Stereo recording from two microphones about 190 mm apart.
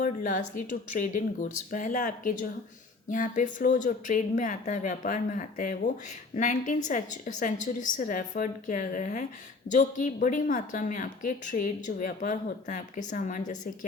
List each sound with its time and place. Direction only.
0.0 s a woman's voice: 45° left (ahead or behind)